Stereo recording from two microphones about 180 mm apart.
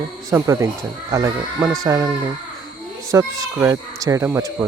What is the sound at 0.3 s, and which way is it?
Speech, 15° right (ahead or behind).